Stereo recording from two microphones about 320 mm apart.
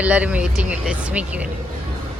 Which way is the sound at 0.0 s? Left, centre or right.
Centre.